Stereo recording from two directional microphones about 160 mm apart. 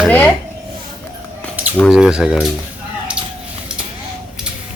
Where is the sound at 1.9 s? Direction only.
5° right (ahead or behind).